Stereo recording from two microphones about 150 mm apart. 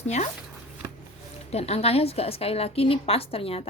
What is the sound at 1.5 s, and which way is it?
Speech, 45° left (ahead or behind).